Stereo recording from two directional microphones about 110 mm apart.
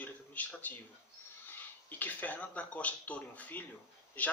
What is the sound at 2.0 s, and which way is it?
Speech, 15° left (ahead or behind).